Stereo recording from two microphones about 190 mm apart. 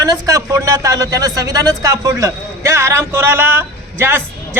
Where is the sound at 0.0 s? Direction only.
20° right (ahead or behind).